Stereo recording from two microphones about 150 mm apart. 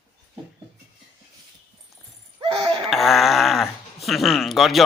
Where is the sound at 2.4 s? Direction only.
35° right (ahead or behind).